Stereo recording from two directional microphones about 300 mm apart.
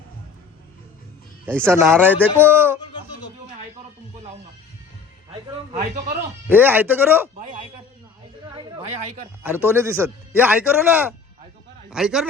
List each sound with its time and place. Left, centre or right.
1.6 s a man's voice: centre
5.3 s a man's voice: right
6.5 s a man's voice: centre
9.4 s a man's voice: centre